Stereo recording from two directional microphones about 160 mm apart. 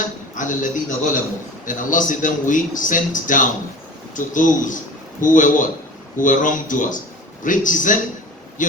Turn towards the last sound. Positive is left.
turn(degrees=55)  # may be behind; listen again after turning